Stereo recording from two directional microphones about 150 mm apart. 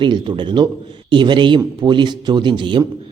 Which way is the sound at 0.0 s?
30° right (ahead or behind).